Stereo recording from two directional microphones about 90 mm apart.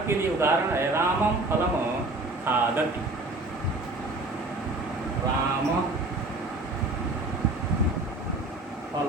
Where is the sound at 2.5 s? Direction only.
20° right (ahead or behind).